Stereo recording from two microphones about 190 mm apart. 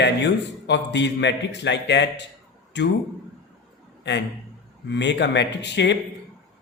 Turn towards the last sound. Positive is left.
turn(degrees=65)  # may be behind; listen again after turning